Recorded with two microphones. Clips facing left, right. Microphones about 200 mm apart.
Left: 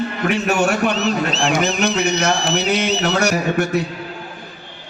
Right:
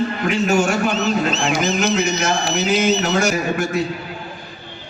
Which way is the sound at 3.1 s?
65° left (ahead or behind).